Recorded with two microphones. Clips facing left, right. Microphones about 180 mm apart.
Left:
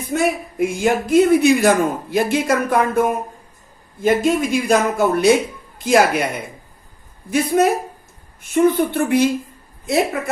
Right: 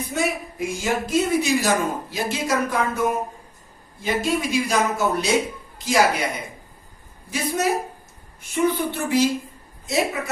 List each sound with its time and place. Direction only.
0.1 s speech: 55° left (ahead or behind)
7.3 s a woman's voice: 55° left (ahead or behind)